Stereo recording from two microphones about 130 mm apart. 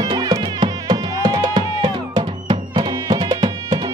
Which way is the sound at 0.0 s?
30° right (ahead or behind).